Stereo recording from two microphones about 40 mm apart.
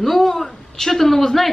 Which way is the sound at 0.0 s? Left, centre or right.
Centre.